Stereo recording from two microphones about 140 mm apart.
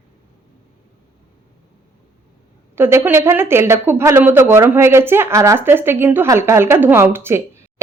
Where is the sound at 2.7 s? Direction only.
15° right (ahead or behind).